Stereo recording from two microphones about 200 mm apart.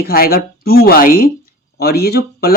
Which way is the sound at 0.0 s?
50° left (ahead or behind).